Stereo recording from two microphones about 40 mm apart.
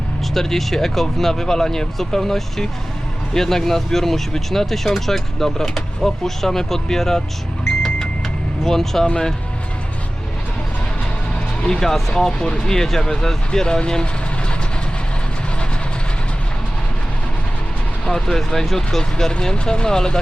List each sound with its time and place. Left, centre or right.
0.3 s speech: centre
8.6 s speech: centre
11.6 s speech: centre
18.0 s speech: centre
18.8 s speech: centre